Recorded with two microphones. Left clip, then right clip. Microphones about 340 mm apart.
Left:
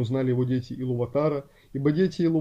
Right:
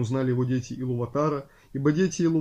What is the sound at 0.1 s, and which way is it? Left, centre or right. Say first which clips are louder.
Speech: left 1 dB; centre.